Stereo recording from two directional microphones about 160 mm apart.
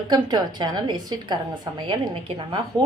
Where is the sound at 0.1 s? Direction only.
25° right (ahead or behind).